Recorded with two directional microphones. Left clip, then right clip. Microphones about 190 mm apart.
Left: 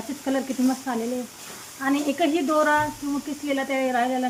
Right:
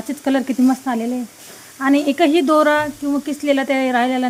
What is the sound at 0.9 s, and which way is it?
Speech, 60° right (ahead or behind).